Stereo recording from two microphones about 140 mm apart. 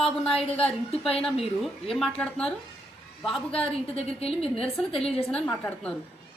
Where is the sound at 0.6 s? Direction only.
45° left (ahead or behind).